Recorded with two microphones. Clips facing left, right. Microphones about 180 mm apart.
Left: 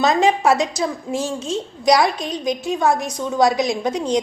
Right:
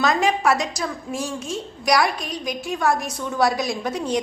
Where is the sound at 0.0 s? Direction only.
25° left (ahead or behind).